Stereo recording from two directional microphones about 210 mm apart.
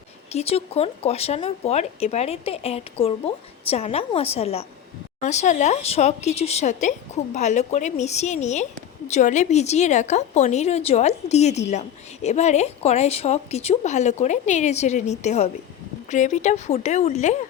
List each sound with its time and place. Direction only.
0.3 s a woman's voice: 30° left (ahead or behind)